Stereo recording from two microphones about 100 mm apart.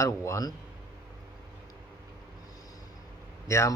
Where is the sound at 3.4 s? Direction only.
30° left (ahead or behind).